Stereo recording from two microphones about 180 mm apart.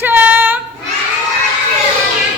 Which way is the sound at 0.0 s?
10° right (ahead or behind).